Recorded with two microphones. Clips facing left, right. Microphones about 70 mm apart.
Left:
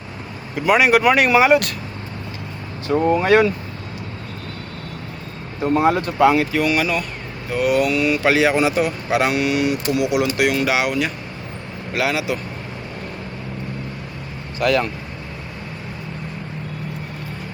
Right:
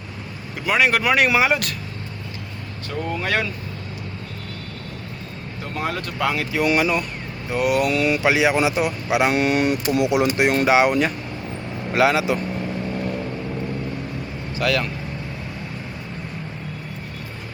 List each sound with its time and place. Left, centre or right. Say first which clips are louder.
0.5 s speech: left 4 dB; centre
2.9 s speech: left 9 dB; left
5.6 s speech: left 10 dB; left
6.6 s speech: even; right
8.2 s speech: left 3 dB; centre
9.3 s speech: even; right
14.6 s speech: left 4 dB; centre